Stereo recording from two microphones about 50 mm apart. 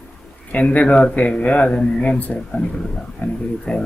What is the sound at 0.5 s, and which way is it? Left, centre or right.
A man's voice, left.